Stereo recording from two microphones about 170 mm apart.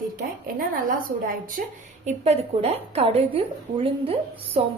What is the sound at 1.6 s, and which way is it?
Speech, 55° right (ahead or behind).